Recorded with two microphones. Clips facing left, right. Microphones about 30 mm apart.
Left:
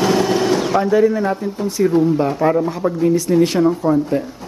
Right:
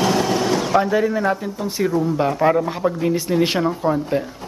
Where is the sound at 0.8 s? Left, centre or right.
Centre.